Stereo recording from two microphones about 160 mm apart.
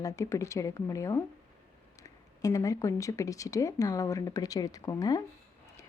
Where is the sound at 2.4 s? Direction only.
20° left (ahead or behind).